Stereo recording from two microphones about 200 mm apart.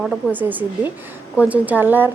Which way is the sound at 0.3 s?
10° right (ahead or behind).